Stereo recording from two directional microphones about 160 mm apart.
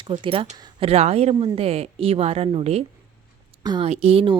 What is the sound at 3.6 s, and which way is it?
Speech, 30° right (ahead or behind).